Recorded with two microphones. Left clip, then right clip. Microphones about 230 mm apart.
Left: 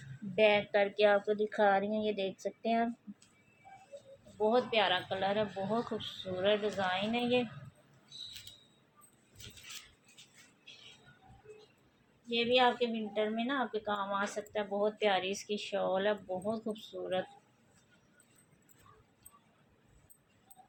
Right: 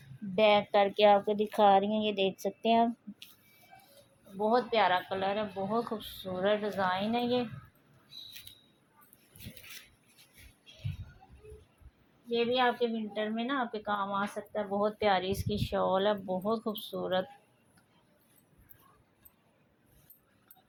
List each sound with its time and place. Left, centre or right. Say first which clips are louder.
0.3 s speech: right 3 dB; right
4.4 s speech: right 2 dB; right
12.3 s speech: even; right